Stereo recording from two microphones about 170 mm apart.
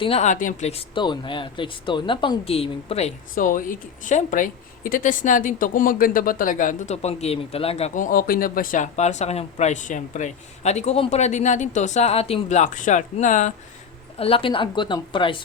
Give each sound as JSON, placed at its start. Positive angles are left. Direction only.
{"t": 0.0, "sound": "speech", "side_deg": 40}
{"t": 3.3, "sound": "a woman's voice", "side_deg": 50}
{"t": 14.2, "sound": "speech", "side_deg": 35}